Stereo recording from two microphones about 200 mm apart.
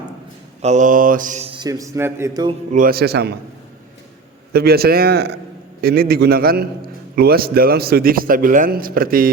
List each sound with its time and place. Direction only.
0.6 s mantra: 35° right (ahead or behind); by 2.6 s 20° right (ahead or behind)
2.7 s a man's voice: 45° right (ahead or behind)
4.5 s a man's voice: 50° right (ahead or behind)